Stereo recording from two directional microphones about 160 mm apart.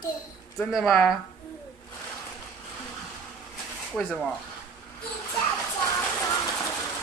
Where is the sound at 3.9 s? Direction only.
Centre (ahead or behind).